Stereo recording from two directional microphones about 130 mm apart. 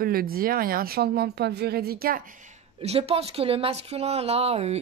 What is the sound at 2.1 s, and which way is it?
Speech, 85° right.